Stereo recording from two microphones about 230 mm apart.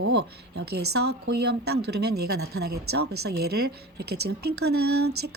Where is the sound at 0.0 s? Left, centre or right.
Right.